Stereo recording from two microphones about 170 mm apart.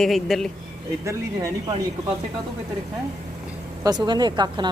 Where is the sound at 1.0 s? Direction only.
15° right (ahead or behind).